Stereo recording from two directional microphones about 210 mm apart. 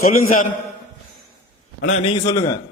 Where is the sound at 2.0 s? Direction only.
25° left (ahead or behind).